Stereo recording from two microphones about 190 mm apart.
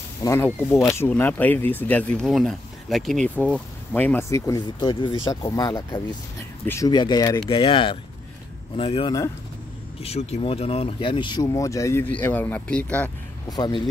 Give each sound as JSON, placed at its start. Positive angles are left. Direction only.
{"t": 0.2, "sound": "speech", "side_deg": 15}
{"t": 13.5, "sound": "speech", "side_deg": 20}